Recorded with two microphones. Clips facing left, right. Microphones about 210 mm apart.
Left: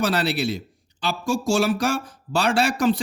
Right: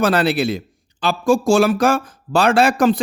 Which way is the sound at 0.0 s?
90° right.